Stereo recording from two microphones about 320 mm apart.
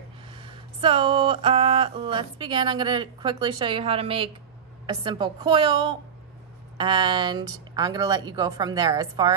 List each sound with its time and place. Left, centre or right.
0.4 s a woman's voice: centre